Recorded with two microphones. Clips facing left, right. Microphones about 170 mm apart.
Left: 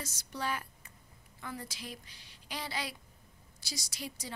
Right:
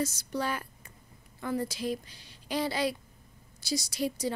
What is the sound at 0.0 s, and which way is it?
Speech, 40° right (ahead or behind).